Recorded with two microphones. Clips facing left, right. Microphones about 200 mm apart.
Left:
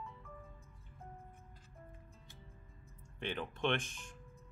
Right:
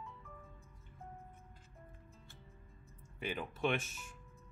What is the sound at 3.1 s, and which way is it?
Speech, 5° right (ahead or behind).